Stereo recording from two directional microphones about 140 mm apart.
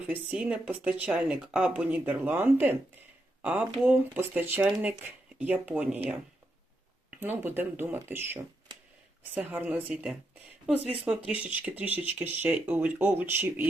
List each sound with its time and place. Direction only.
0.3 s speech: 10° right (ahead or behind)
7.2 s speech: 15° right (ahead or behind)